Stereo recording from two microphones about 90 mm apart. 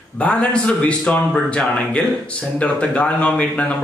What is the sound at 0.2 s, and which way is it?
Speech, 15° left (ahead or behind).